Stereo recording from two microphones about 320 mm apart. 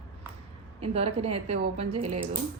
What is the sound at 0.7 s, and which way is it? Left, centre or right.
A woman's voice, centre.